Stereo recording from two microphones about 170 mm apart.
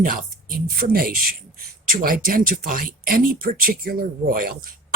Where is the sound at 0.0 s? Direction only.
60° right (ahead or behind).